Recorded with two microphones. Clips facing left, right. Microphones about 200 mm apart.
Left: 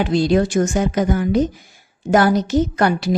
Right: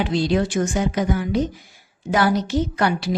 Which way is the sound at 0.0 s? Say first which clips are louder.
Left 4 dB; 45° left (ahead or behind).